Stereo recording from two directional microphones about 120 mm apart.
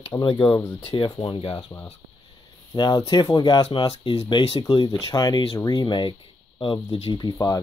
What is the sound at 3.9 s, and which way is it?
Speech, 55° left (ahead or behind).